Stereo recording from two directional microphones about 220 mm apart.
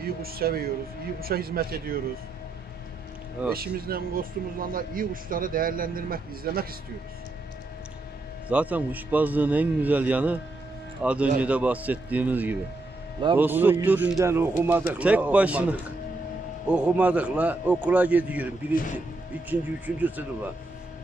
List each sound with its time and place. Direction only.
0.0 s a man's voice: 45° right (ahead or behind)
3.5 s speech: 45° right (ahead or behind)
8.5 s speech: 5° right (ahead or behind)